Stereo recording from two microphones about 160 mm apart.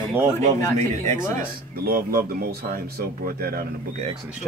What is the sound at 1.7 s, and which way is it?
Speech, 70° right (ahead or behind).